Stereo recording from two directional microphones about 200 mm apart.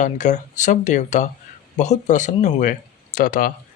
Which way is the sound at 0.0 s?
35° left (ahead or behind).